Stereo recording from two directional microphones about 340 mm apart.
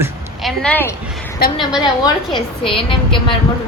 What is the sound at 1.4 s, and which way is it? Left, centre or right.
Speech, left.